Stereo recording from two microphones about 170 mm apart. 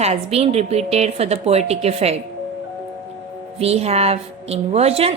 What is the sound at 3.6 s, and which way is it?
A woman's voice, 35° right (ahead or behind).